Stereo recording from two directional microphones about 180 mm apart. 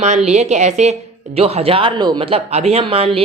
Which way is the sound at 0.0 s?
40° right (ahead or behind).